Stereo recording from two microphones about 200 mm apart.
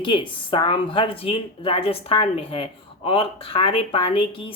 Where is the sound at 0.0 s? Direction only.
25° left (ahead or behind).